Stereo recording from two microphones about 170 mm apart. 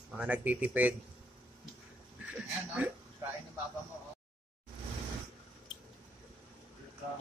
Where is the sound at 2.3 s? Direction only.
5° right (ahead or behind).